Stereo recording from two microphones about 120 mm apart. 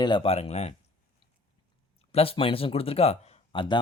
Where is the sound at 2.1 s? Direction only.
55° left (ahead or behind).